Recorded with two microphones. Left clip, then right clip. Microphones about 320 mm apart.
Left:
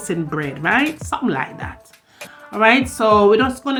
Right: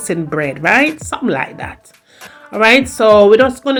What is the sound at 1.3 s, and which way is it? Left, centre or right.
Speech, left.